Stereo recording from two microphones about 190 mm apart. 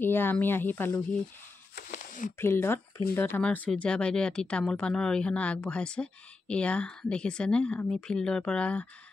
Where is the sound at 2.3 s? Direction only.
10° left (ahead or behind).